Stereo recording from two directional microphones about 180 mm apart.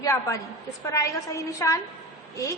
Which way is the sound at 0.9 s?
20° left (ahead or behind).